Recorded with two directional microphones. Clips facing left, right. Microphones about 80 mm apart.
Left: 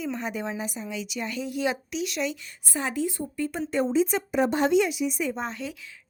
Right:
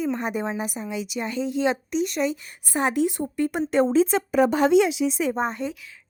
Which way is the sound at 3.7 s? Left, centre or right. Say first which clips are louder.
Right 4 dB; right.